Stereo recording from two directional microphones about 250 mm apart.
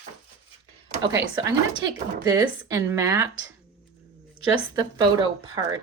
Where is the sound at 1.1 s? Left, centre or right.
Centre.